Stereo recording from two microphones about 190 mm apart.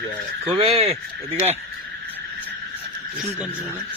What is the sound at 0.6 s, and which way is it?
Speech, 30° right (ahead or behind).